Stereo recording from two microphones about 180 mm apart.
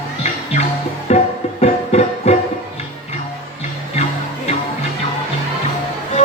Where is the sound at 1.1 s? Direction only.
35° left (ahead or behind).